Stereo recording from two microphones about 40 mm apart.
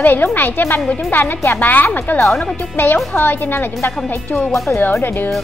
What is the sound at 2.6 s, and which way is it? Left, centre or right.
Music, left.